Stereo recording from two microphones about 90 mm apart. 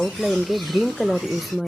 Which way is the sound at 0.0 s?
Centre (ahead or behind).